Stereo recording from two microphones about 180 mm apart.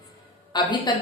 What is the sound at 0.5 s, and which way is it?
Speech, 25° left (ahead or behind).